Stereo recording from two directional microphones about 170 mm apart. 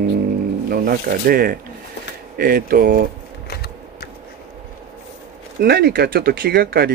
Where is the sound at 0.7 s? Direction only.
60° right (ahead or behind).